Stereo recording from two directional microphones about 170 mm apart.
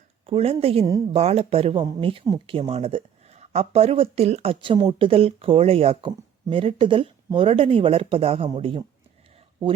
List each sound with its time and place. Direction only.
0.3 s speech: 35° right (ahead or behind)